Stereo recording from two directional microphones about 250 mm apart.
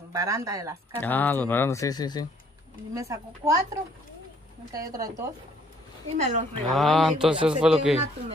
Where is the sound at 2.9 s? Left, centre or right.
Centre.